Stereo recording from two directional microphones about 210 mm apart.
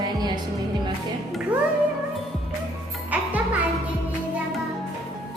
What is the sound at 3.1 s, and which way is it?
Music, 5° right (ahead or behind).